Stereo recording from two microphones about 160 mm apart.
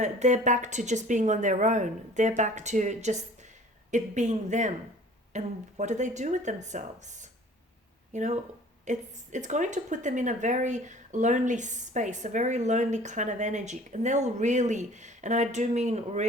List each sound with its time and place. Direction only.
0.0 s speech: 50° right (ahead or behind)